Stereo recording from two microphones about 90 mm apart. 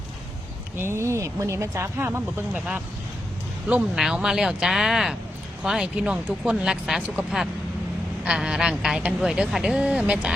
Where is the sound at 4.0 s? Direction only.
5° right (ahead or behind).